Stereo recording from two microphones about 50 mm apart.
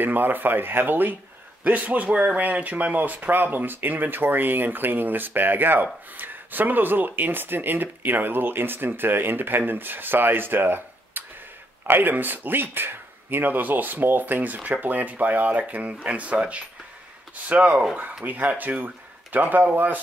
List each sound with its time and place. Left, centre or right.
0.0 s speech: right
1.6 s speech: right